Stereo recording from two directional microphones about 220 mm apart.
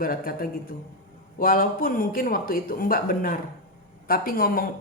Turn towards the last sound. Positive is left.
turn(degrees=40)  # may be behind; listen again after turning